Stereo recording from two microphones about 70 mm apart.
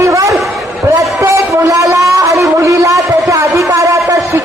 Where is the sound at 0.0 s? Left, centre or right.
Right.